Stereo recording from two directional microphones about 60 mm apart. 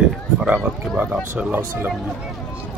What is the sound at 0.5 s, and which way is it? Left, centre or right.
Speech, right.